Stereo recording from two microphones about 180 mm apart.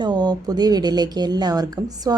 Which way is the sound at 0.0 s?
25° right (ahead or behind).